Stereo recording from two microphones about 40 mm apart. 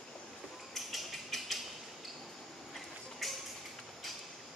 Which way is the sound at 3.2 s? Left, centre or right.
Centre.